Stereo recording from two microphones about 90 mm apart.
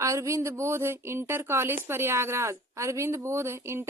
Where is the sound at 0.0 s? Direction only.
35° right (ahead or behind).